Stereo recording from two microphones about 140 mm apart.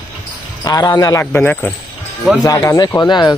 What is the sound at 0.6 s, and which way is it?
Speech, 25° left (ahead or behind).